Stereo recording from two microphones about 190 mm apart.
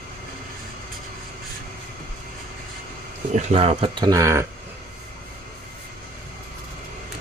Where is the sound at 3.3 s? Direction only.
35° right (ahead or behind); by 4.4 s 15° right (ahead or behind).